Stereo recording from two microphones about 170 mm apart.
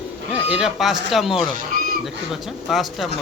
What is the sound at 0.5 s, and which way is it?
Speech, centre (ahead or behind).